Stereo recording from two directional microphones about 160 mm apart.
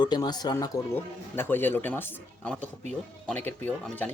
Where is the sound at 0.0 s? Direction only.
25° left (ahead or behind).